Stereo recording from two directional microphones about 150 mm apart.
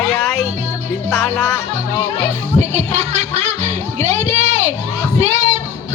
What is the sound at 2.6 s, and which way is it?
Music, 50° right (ahead or behind).